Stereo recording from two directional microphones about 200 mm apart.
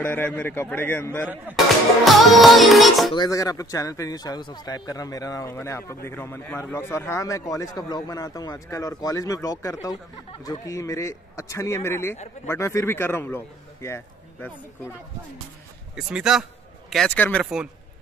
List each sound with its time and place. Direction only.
0.0 s a man's voice: 10° left (ahead or behind)
2.0 s music: centre (ahead or behind)
3.2 s a man's voice: 15° left (ahead or behind)
15.9 s music: 5° right (ahead or behind)